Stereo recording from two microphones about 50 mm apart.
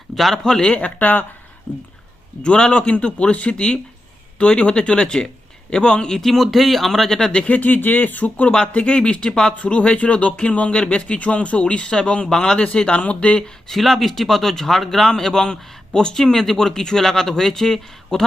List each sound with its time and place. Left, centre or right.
0.1 s a sound: centre
0.4 s a man's voice: centre
0.8 s speech: left
2.4 s a man's voice: centre
6.2 s speech: centre
7.4 s speech: left
8.5 s speech: left
13.7 s a man's voice: centre